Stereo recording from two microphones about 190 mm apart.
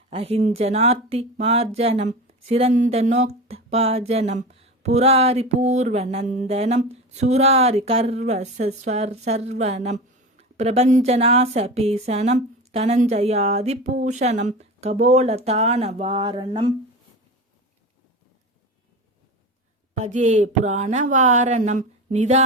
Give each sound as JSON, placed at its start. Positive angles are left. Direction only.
{"t": 0.1, "sound": "a woman's voice", "side_deg": -30}
{"t": 19.9, "sound": "a woman's voice", "side_deg": -40}